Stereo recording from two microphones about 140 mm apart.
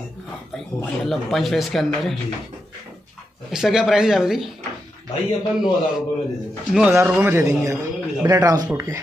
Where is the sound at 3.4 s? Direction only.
5° right (ahead or behind).